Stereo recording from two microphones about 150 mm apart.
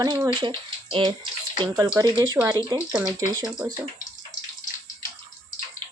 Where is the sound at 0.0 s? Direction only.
25° right (ahead or behind).